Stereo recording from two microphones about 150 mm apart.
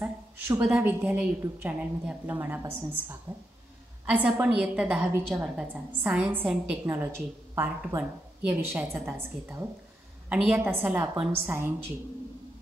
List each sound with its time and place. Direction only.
0.0 s a woman's voice: 10° right (ahead or behind)
6.9 s a woman's voice: 15° right (ahead or behind)
10.3 s a woman's voice: 5° right (ahead or behind)
10.6 s a woman's voice: 15° right (ahead or behind)